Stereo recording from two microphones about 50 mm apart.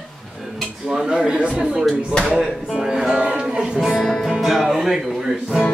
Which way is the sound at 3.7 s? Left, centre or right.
Centre.